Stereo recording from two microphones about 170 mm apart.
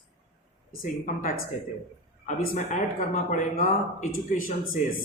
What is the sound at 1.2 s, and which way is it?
Speech, 50° left (ahead or behind).